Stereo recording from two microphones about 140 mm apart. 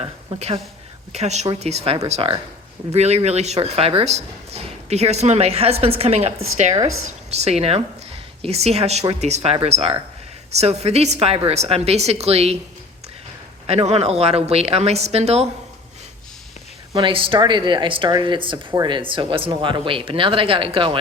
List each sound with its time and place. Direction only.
0.3 s speech: 50° right (ahead or behind)
13.7 s speech: 50° right (ahead or behind)
16.9 s speech: 40° right (ahead or behind)